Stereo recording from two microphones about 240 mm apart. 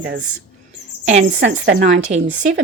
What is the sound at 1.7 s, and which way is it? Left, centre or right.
Speech, right.